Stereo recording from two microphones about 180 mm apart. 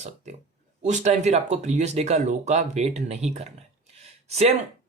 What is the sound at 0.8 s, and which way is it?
Speech, 40° right (ahead or behind).